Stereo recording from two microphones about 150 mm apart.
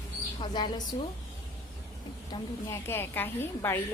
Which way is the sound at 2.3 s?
25° left (ahead or behind).